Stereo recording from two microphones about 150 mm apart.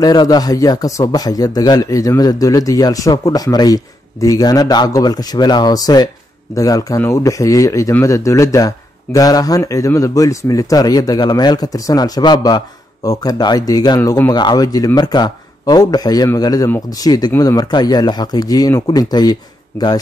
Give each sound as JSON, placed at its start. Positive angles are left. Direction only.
{"t": 0.0, "sound": "speech", "side_deg": 25}